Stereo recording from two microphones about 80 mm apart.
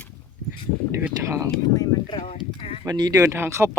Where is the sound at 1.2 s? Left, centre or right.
Right.